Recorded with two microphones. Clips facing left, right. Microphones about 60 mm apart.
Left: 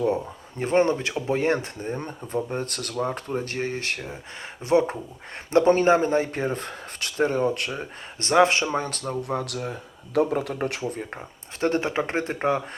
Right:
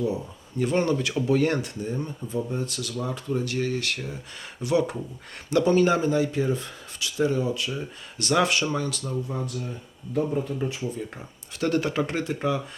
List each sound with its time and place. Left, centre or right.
0.5 s speech: left
8.2 s speech: left
9.2 s speech: left
11.6 s speech: left